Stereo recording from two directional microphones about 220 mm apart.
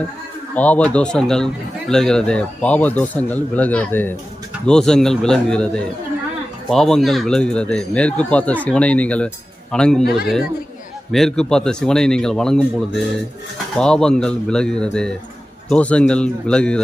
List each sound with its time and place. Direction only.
0.5 s speech: 5° left (ahead or behind)
10.0 s speech: 45° left (ahead or behind)
11.1 s speech: centre (ahead or behind)